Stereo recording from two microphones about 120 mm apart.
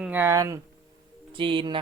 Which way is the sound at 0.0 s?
15° right (ahead or behind).